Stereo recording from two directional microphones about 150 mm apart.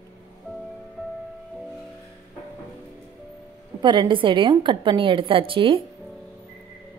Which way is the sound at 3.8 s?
30° right (ahead or behind).